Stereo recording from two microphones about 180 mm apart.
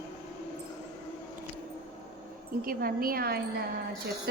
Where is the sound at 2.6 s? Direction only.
55° right (ahead or behind).